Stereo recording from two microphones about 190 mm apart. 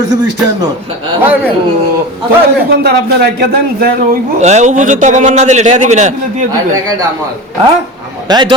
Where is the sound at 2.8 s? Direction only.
55° right (ahead or behind).